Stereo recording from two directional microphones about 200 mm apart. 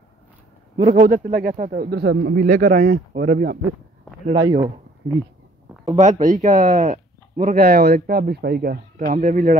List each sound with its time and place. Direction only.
0.9 s speech: 40° right (ahead or behind)
4.3 s speech: 20° right (ahead or behind)
5.9 s speech: 35° right (ahead or behind)